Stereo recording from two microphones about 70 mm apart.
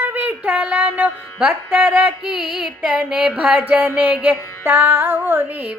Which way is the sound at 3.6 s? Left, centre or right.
Right.